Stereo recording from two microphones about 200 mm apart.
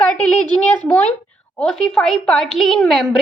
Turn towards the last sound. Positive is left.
turn(degrees=0)  # may be behind; listen again after turning